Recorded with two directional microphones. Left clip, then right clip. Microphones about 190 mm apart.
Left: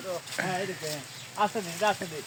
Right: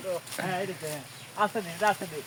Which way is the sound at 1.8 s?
25° left (ahead or behind).